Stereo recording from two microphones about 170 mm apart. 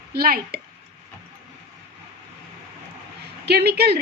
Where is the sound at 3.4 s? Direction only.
75° right (ahead or behind).